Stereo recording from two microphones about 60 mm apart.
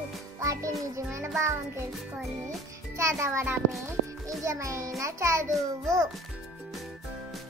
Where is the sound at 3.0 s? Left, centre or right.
Right.